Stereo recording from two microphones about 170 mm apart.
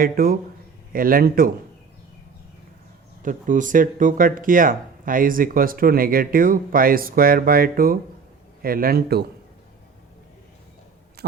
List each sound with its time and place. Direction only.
0.0 s speech: 60° right (ahead or behind)
3.2 s speech: 50° right (ahead or behind); by 9.2 s 65° right (ahead or behind)
11.2 s heart sounds: 70° right (ahead or behind)